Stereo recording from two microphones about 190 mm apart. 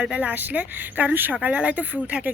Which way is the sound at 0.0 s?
5° right (ahead or behind).